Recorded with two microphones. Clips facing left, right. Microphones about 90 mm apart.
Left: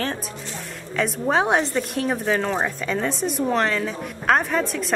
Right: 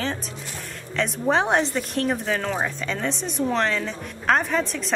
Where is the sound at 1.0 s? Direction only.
Centre (ahead or behind).